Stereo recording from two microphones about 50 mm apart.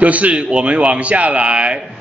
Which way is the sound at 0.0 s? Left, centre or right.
Right.